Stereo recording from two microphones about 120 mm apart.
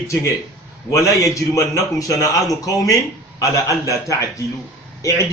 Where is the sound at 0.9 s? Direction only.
25° left (ahead or behind).